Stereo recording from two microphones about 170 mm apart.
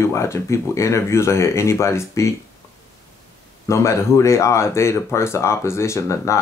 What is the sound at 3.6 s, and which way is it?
Speech, 15° left (ahead or behind).